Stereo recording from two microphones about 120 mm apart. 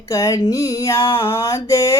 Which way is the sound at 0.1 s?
25° left (ahead or behind).